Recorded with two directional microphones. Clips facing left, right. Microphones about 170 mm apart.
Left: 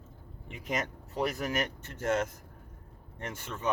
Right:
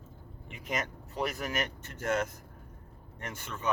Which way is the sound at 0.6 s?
35° left (ahead or behind).